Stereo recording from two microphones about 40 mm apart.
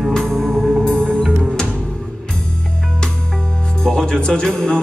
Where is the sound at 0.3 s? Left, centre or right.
Centre.